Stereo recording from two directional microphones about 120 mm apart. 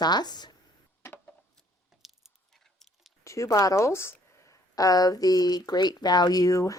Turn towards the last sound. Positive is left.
turn(degrees=30)  # may be behind; listen again after turning